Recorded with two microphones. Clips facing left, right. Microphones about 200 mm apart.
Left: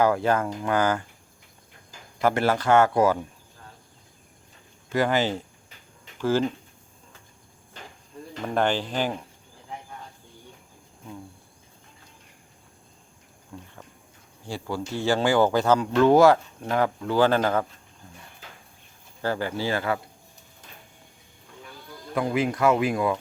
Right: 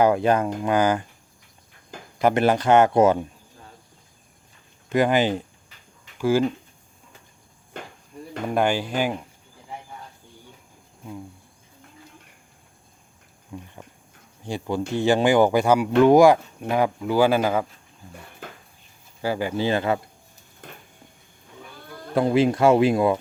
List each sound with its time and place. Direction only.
0.0 s speech: 20° right (ahead or behind)
2.2 s speech: 20° right (ahead or behind)
4.9 s speech: 15° right (ahead or behind)
7.7 s a sound: 60° right (ahead or behind)
8.5 s speech: 10° right (ahead or behind)
13.5 s speech: 10° right (ahead or behind)
18.4 s a sound: 55° right (ahead or behind)
19.2 s speech: 15° right (ahead or behind)
20.6 s a sound: 60° right (ahead or behind)
22.1 s speech: 30° right (ahead or behind)